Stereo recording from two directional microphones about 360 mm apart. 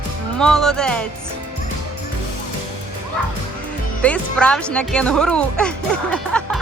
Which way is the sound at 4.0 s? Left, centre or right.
Centre.